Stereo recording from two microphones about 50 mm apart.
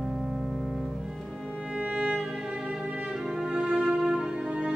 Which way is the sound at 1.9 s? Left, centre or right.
Right.